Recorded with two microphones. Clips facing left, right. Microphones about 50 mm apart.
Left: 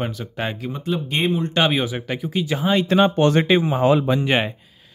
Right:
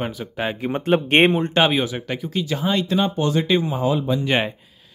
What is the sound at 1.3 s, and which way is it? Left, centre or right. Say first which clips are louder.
Speech: right 2 dB; right.